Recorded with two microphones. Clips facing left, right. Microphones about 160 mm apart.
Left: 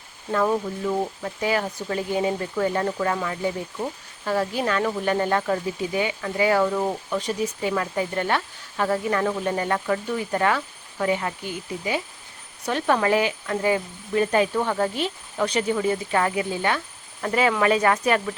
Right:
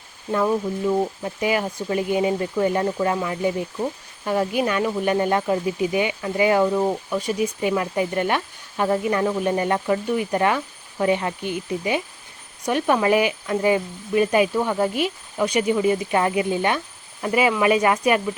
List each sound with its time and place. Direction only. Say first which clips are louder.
0.9 s speech: right 4 dB; 15° right (ahead or behind)